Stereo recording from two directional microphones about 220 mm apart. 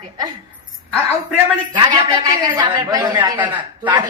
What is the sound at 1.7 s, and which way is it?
A woman's voice, 20° right (ahead or behind).